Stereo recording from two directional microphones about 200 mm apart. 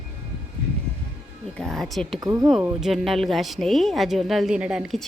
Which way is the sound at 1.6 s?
Centre (ahead or behind).